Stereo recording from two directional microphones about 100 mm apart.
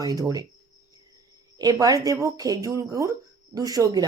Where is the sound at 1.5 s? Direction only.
40° right (ahead or behind).